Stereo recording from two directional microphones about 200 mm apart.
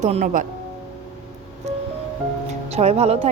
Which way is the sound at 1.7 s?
35° right (ahead or behind).